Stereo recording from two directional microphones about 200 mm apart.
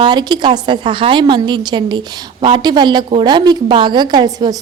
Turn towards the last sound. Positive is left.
turn(degrees=-20)  # may be behind; listen again after turning